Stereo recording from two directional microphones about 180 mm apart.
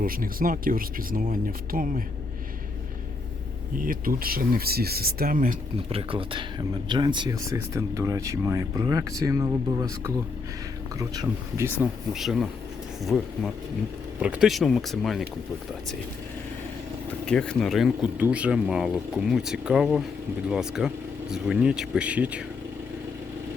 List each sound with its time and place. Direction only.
0.0 s speech: 50° right (ahead or behind)
3.8 s speech: 50° right (ahead or behind)
5.9 s speech: 30° right (ahead or behind); by 11.9 s 15° right (ahead or behind)
12.1 s speech: centre (ahead or behind)
17.2 s speech: 5° left (ahead or behind)